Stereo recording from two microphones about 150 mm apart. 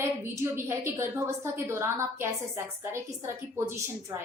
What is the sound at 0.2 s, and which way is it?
A woman's voice, 15° right (ahead or behind).